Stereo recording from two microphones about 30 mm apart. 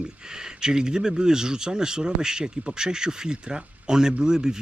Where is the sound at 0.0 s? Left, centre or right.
Right.